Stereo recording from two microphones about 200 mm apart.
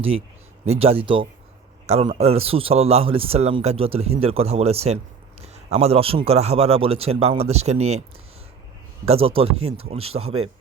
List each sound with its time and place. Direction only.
0.6 s a man's voice: 30° right (ahead or behind)
9.0 s a man's voice: 30° right (ahead or behind)